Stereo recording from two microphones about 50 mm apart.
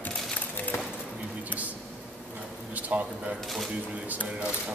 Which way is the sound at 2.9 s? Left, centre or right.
Right.